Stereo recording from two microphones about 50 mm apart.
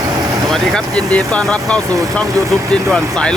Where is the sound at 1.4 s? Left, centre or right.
Centre.